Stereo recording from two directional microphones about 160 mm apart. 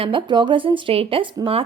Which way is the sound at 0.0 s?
30° right (ahead or behind).